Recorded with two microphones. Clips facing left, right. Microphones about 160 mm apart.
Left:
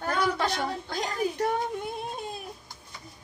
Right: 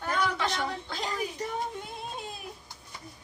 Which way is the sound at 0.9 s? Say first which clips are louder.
Left 2 dB; 45° left (ahead or behind).